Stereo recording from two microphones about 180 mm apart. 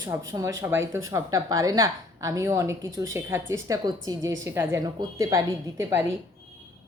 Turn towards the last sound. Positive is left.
turn(degrees=-15)  # may be behind; listen again after turning